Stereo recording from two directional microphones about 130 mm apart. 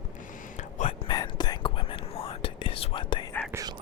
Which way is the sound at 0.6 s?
65° left (ahead or behind).